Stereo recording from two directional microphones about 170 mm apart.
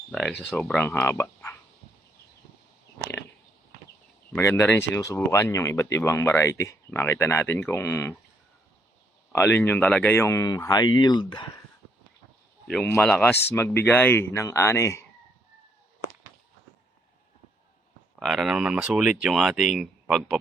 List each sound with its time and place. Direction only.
0.1 s speech: 5° left (ahead or behind)
4.3 s speech: 15° left (ahead or behind)
9.3 s speech: 15° left (ahead or behind)
12.6 s speech: 10° left (ahead or behind)
18.2 s speech: centre (ahead or behind)